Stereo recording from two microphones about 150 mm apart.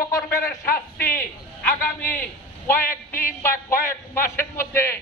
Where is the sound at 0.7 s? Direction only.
75° left (ahead or behind).